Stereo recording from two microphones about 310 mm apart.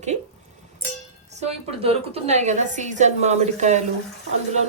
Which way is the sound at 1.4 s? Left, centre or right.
Right.